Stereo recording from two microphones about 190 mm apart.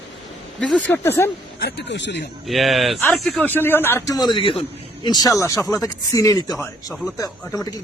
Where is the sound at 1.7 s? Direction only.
65° left (ahead or behind).